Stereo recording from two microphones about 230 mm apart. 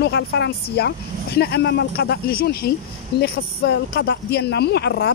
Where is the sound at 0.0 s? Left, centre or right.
Left.